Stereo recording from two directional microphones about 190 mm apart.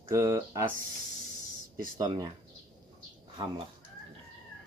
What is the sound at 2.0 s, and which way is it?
Speech, 20° right (ahead or behind).